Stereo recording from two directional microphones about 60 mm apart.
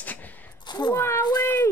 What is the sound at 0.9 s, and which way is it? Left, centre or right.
Speech, left.